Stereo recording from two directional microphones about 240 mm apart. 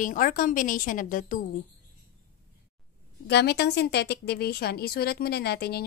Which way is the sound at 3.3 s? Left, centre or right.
Left.